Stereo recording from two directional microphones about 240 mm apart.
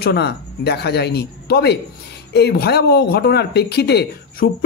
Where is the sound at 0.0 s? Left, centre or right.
Left.